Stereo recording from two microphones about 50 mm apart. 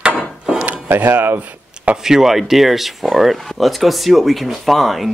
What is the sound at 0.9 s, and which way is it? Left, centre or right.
Speech, right.